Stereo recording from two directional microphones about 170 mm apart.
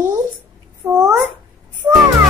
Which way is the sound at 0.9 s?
15° right (ahead or behind).